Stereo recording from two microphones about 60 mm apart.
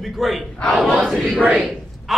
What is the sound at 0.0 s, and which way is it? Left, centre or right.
Battle cry, centre.